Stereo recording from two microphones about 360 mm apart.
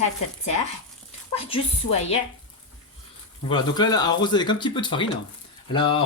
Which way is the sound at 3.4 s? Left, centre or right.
Centre.